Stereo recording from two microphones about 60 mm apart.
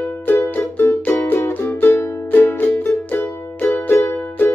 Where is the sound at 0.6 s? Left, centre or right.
Left.